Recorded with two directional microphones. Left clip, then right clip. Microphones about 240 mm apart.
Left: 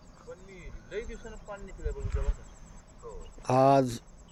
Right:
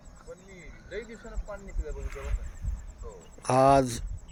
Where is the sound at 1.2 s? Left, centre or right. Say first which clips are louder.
Right 1 dB; right.